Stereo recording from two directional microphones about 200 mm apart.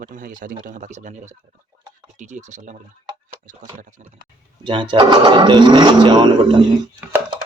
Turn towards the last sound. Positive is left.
turn(degrees=-20)  # may be behind; listen again after turning